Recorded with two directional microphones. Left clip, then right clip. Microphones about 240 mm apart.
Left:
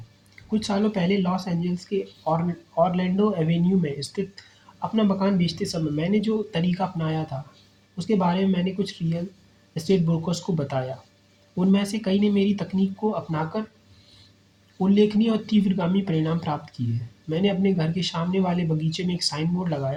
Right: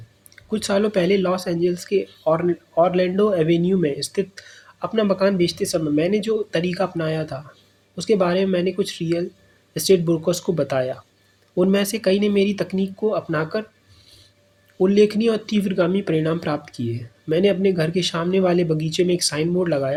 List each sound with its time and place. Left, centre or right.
0.5 s speech: right
14.8 s speech: right